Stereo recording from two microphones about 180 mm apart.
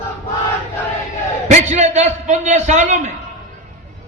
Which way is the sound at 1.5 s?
40° right (ahead or behind).